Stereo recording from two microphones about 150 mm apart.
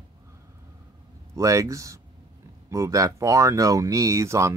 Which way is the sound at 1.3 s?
20° right (ahead or behind).